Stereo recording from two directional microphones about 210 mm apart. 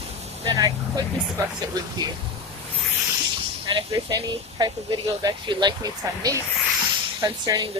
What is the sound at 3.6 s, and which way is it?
Speech, 20° right (ahead or behind).